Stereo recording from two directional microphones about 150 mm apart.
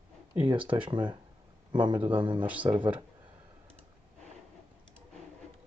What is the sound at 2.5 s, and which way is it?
Speech, 10° right (ahead or behind).